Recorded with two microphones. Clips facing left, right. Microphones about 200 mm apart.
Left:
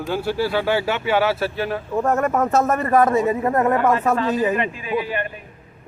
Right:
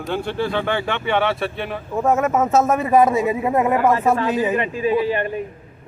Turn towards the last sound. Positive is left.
turn(degrees=-30)  # may be behind; listen again after turning